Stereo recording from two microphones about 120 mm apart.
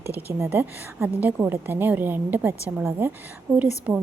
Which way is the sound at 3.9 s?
10° right (ahead or behind).